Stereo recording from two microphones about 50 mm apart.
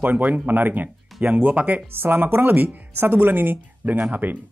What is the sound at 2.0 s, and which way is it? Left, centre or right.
A man's voice, right.